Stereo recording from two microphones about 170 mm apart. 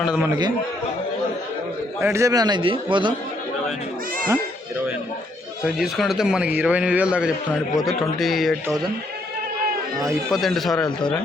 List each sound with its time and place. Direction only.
0.0 s speech: 5° right (ahead or behind)
2.0 s a man's voice: 15° right (ahead or behind)
5.6 s a man's voice: centre (ahead or behind)
10.2 s speech: centre (ahead or behind)